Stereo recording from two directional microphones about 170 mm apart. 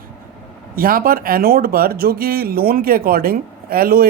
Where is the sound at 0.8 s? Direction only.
60° right (ahead or behind).